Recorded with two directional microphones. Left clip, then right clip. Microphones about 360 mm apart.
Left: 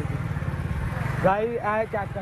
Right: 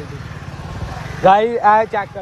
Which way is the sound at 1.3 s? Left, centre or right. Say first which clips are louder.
Right 12 dB; right.